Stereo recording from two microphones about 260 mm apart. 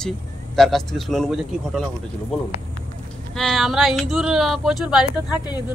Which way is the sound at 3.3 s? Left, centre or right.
Centre.